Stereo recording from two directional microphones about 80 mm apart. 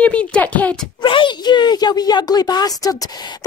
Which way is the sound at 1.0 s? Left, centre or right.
Left.